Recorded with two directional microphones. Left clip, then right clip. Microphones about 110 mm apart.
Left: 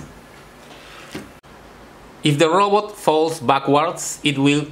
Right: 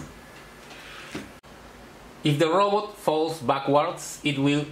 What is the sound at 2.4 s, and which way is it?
Speech, 35° left (ahead or behind).